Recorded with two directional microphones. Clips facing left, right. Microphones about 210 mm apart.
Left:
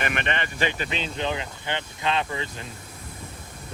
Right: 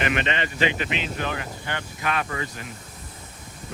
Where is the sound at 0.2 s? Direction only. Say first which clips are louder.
Right 2 dB; 55° left (ahead or behind).